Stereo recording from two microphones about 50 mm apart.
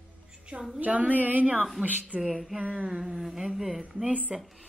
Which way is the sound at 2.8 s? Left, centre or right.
Centre.